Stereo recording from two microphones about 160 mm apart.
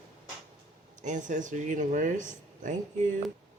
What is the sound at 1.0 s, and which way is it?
Speech, 50° right (ahead or behind).